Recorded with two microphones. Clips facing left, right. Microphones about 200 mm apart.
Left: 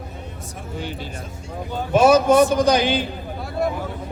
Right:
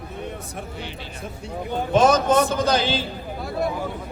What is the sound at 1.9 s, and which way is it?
A man's voice, 10° left (ahead or behind).